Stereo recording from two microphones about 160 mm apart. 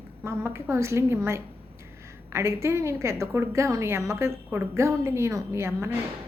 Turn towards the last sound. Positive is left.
turn(degrees=-15)  # may be behind; listen again after turning